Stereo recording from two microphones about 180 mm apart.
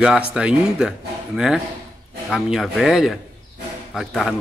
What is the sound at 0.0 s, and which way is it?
Cutlery, 5° right (ahead or behind).